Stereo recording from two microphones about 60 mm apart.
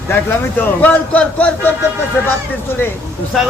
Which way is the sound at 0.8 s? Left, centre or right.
Left.